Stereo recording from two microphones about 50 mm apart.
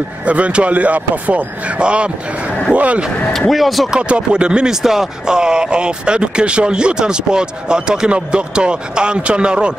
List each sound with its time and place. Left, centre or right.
0.3 s speech: right
3.3 s speech: centre
3.9 s speech: centre